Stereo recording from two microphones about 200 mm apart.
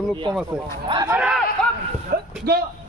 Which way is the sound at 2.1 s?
45° right (ahead or behind).